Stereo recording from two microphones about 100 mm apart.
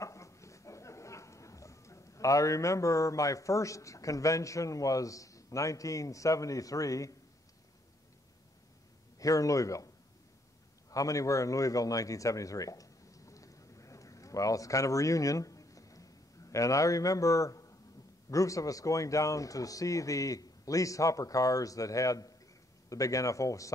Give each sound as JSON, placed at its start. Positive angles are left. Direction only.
{"t": 0.0, "sound": "speech", "side_deg": 30}
{"t": 9.2, "sound": "speech", "side_deg": 35}
{"t": 10.9, "sound": "a sound", "side_deg": 35}
{"t": 18.3, "sound": "speech", "side_deg": 35}